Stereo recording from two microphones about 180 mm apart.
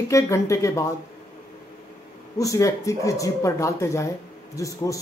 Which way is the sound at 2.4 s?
20° left (ahead or behind).